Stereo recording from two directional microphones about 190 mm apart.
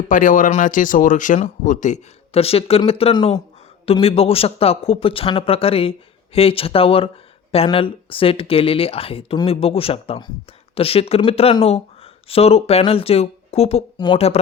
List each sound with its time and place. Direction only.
0.1 s speech: 45° left (ahead or behind)